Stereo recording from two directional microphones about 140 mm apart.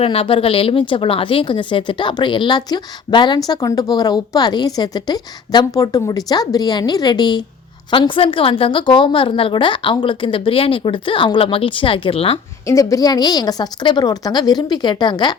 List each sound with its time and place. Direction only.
0.0 s speech: 45° left (ahead or behind)
12.6 s a woman's voice: 25° left (ahead or behind)